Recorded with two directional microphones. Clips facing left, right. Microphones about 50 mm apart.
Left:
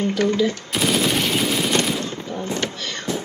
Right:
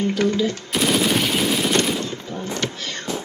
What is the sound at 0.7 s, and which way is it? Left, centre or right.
Machine gun, centre.